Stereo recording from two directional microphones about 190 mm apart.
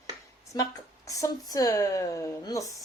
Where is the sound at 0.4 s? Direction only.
20° left (ahead or behind).